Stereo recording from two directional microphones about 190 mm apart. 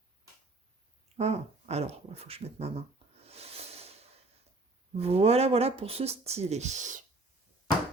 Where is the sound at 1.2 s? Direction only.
35° right (ahead or behind).